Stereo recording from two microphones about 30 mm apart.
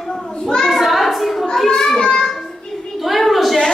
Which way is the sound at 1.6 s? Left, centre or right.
Centre.